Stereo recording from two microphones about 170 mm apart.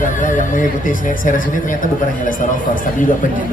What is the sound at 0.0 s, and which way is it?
Speech, 50° left (ahead or behind).